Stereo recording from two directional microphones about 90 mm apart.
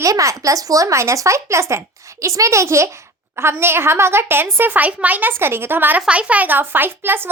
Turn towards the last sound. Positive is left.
turn(degrees=-25)  # may be behind; listen again after turning